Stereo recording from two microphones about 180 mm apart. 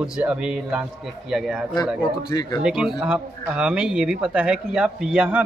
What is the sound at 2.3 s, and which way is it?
Speech, 20° left (ahead or behind).